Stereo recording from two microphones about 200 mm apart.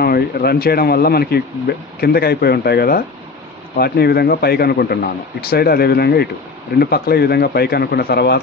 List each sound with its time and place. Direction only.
0.0 s speech: 50° left (ahead or behind)